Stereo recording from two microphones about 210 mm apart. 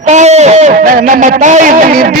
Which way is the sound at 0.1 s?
35° right (ahead or behind).